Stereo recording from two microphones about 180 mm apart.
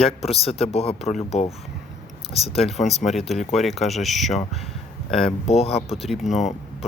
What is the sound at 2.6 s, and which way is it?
Speech, centre (ahead or behind).